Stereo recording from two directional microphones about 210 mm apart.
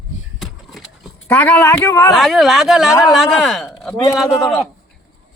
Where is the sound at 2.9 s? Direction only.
15° left (ahead or behind).